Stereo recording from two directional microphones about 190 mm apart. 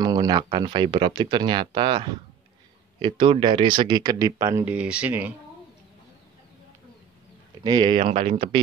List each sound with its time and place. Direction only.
0.0 s speech: 20° right (ahead or behind)
7.6 s speech: 25° right (ahead or behind)